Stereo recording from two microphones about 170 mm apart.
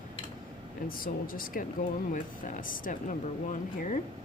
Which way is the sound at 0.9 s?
55° left (ahead or behind).